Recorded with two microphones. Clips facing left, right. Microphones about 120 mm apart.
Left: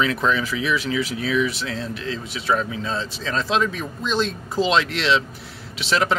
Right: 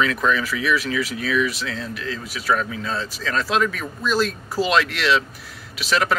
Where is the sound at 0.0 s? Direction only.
30° left (ahead or behind).